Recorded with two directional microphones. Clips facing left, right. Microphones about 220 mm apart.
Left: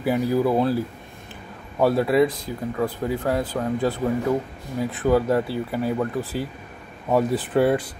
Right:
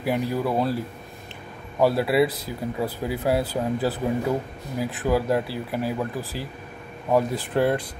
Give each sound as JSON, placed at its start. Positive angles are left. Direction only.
{"t": 0.0, "sound": "speech", "side_deg": 0}
{"t": 1.8, "sound": "speech", "side_deg": 0}